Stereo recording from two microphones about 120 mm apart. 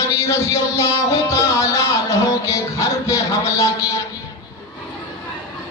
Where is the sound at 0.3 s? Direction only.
25° left (ahead or behind).